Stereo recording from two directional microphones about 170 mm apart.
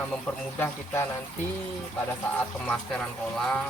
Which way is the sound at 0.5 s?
15° left (ahead or behind).